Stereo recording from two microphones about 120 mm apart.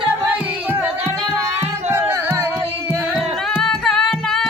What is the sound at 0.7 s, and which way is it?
Music, 20° right (ahead or behind).